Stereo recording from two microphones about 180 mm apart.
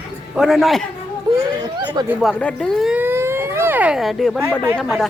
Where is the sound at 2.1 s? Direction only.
Centre (ahead or behind).